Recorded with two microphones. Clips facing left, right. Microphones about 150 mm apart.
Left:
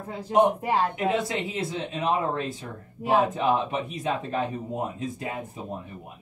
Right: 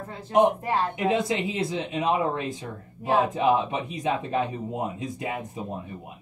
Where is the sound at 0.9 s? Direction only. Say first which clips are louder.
Right 2 dB; 20° right (ahead or behind).